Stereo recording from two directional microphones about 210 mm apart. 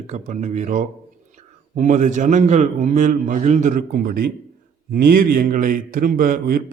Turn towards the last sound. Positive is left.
turn(degrees=-45)  # may be behind; listen again after turning